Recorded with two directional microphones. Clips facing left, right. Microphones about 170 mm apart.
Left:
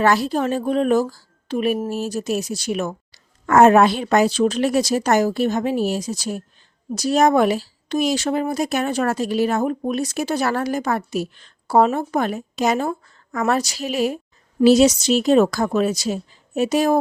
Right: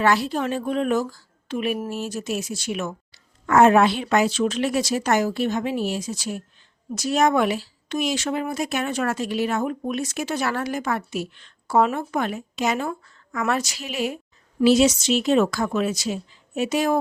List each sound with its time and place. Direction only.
0.0 s speech: 40° left (ahead or behind)